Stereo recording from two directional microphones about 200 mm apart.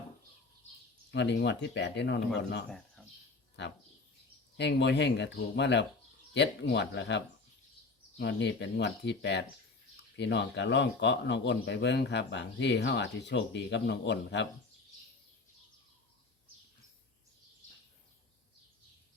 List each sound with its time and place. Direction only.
1.1 s speech: 60° left (ahead or behind)
2.6 s speech: 5° left (ahead or behind)
3.6 s speech: 60° left (ahead or behind)
8.2 s speech: 60° left (ahead or behind)